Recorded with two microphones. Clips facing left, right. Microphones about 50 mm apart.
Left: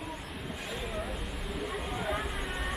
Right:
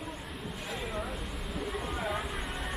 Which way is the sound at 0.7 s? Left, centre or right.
Centre.